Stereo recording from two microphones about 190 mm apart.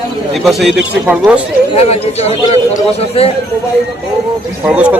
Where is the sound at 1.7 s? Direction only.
35° left (ahead or behind).